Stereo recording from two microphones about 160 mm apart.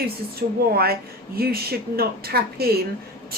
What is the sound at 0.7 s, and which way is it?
A woman's voice, 70° right (ahead or behind).